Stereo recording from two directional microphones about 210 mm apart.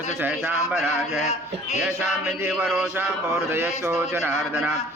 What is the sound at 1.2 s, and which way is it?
Speech, 30° left (ahead or behind).